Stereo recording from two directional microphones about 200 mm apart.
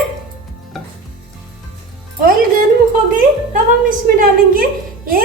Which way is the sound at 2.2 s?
45° right (ahead or behind).